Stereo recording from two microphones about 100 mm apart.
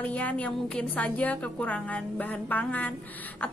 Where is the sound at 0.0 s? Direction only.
15° left (ahead or behind).